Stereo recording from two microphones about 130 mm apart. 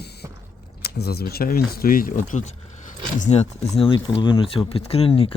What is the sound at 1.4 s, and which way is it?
Speech, 90° left.